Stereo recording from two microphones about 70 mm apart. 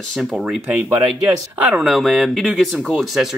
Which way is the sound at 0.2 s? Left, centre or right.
Centre.